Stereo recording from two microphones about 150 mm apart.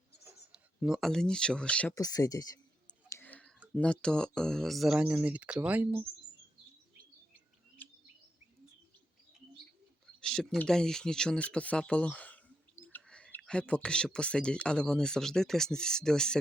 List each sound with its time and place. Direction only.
0.5 s speech: 5° right (ahead or behind)
2.0 s speech: 25° left (ahead or behind)
3.1 s whispering: 15° left (ahead or behind)
3.8 s speech: 5° left (ahead or behind); by 6.0 s 10° right (ahead or behind)
7.8 s chirp: 10° left (ahead or behind)
10.2 s speech: 5° left (ahead or behind)